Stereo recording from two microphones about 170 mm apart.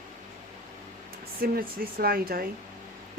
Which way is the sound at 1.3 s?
65° right (ahead or behind).